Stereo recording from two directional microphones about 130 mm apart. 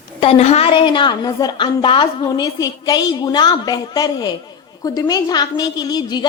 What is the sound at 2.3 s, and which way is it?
A woman's voice, 30° left (ahead or behind).